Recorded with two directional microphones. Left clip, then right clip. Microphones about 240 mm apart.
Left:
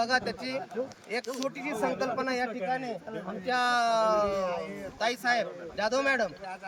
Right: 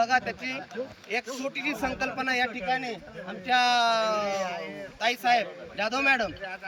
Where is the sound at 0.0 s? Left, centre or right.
Left.